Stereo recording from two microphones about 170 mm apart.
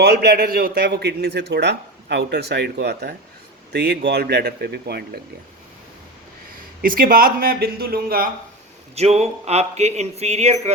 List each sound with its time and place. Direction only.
0.0 s a man's voice: 70° right (ahead or behind)
6.8 s speech: 55° right (ahead or behind)
9.0 s speech: 40° right (ahead or behind)